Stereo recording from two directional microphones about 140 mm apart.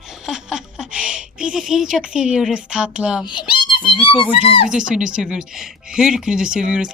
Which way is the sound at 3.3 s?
35° left (ahead or behind).